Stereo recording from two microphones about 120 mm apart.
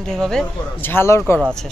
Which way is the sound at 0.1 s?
5° left (ahead or behind).